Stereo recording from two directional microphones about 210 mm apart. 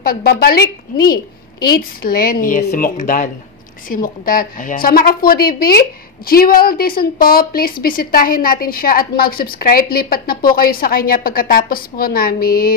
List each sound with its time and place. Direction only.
0.0 s a woman's voice: 45° left (ahead or behind)